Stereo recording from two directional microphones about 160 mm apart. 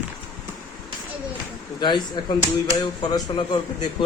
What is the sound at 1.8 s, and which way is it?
Speech, 30° left (ahead or behind).